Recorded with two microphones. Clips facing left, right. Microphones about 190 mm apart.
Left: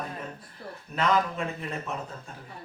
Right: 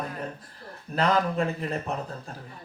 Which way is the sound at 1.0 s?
35° right (ahead or behind).